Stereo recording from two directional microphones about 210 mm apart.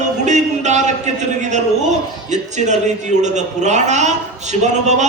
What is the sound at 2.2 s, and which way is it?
A man's voice, 35° right (ahead or behind).